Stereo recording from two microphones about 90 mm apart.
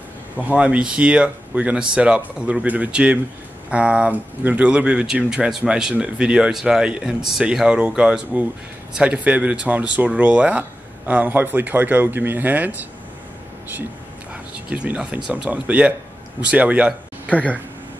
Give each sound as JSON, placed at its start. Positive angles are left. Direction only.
{"t": 0.6, "sound": "speech", "side_deg": -10}
{"t": 14.3, "sound": "speech", "side_deg": -15}